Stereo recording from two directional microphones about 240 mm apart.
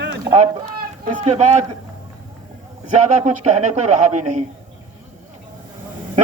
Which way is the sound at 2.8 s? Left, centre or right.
Right.